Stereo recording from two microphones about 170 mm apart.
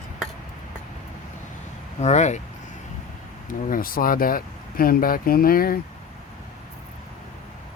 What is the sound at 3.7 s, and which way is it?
Speech, 55° left (ahead or behind).